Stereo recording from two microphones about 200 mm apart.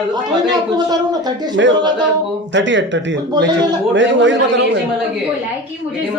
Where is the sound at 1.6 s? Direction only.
65° right (ahead or behind).